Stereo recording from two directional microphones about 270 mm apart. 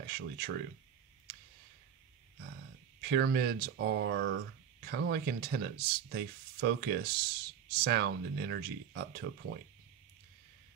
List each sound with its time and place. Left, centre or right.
0.0 s speech: right
3.0 s speech: right